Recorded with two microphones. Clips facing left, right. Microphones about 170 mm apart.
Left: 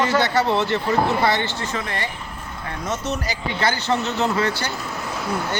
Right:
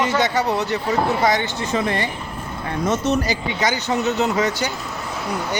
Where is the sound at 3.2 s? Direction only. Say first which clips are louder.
Right 1 dB; 20° right (ahead or behind).